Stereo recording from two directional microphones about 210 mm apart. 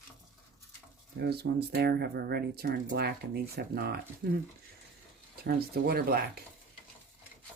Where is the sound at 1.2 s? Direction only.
50° right (ahead or behind).